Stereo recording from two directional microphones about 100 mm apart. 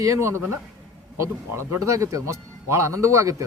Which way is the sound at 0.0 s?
30° right (ahead or behind).